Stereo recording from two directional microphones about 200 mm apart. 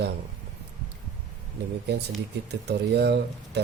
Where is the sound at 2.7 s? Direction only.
55° right (ahead or behind).